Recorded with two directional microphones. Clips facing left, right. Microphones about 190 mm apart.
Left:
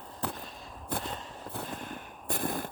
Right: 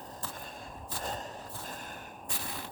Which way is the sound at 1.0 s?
40° right (ahead or behind).